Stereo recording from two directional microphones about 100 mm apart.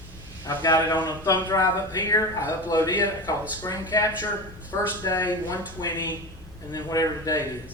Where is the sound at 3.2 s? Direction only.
45° left (ahead or behind).